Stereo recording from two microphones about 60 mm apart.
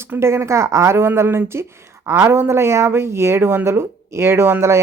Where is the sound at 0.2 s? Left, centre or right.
Right.